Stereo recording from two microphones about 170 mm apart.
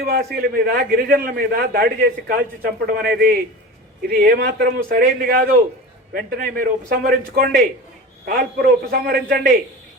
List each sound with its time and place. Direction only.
0.0 s a man's voice: 60° right (ahead or behind)